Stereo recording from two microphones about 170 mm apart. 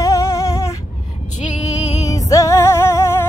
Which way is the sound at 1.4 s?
40° left (ahead or behind).